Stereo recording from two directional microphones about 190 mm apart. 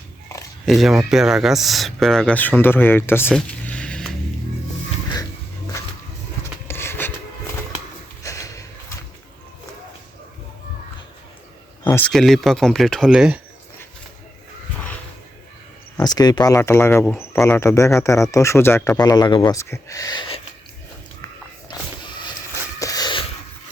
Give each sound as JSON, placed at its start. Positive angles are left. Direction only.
{"t": 0.6, "sound": "speech", "side_deg": 0}
{"t": 6.4, "sound": "rub", "side_deg": 15}
{"t": 8.2, "sound": "a sound", "side_deg": 15}
{"t": 11.9, "sound": "speech", "side_deg": 10}
{"t": 16.0, "sound": "speech", "side_deg": 20}
{"t": 21.7, "sound": "a sound", "side_deg": 25}